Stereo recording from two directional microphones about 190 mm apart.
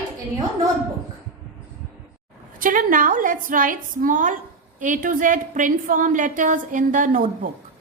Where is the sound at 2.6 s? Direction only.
45° right (ahead or behind).